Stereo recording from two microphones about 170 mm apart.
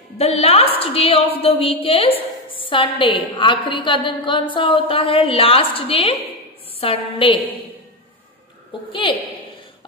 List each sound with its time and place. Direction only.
0.2 s a woman's voice: 35° left (ahead or behind)